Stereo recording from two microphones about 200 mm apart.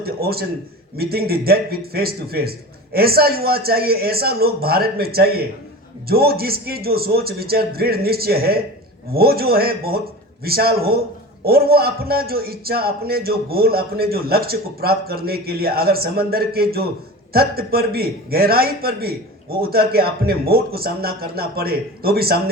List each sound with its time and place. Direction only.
0.0 s a man's voice: 50° right (ahead or behind)